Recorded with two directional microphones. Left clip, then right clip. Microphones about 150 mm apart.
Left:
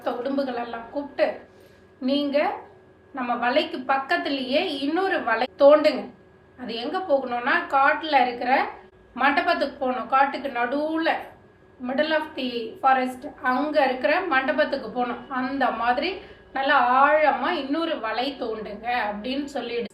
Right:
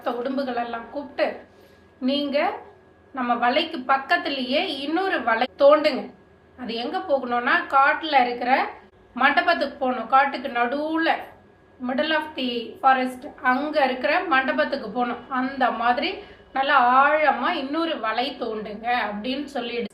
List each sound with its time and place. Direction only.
0.0 s a woman's voice: 10° right (ahead or behind)